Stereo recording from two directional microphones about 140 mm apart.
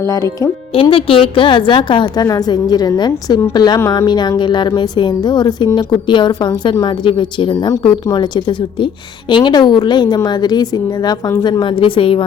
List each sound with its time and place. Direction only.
0.7 s a woman's voice: 40° left (ahead or behind)